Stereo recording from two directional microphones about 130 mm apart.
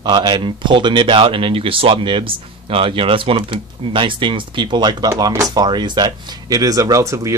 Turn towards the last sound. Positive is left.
turn(degrees=-25)  # may be behind; listen again after turning